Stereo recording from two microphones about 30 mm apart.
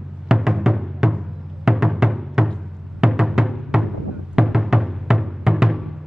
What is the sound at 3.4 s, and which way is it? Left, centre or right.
Music, right.